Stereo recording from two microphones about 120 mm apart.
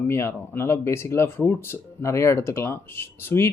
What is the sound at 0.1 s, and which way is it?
Speech, 20° left (ahead or behind).